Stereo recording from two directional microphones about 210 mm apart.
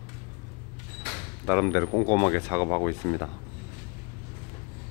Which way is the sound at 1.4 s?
10° left (ahead or behind).